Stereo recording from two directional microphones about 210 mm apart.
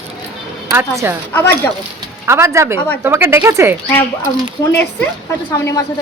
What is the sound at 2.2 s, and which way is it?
Speech, 15° right (ahead or behind).